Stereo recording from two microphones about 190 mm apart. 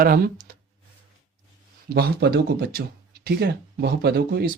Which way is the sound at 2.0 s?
55° right (ahead or behind).